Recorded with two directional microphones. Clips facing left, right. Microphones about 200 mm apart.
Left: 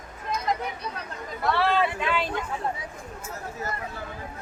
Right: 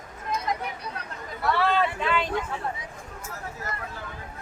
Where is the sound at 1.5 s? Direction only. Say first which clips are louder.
Even; 10° left (ahead or behind).